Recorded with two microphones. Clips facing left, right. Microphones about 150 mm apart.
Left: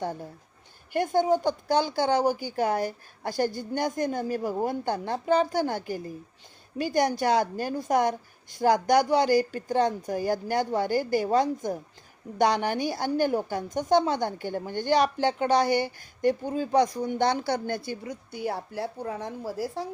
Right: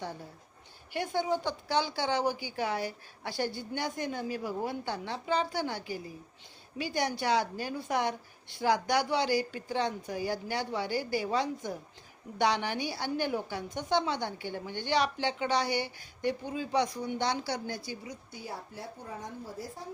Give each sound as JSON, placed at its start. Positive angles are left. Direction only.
{"t": 0.9, "sound": "a woman's voice", "side_deg": 45}